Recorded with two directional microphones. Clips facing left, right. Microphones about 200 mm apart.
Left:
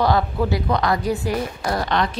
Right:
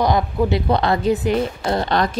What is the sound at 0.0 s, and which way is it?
Speech, 15° right (ahead or behind).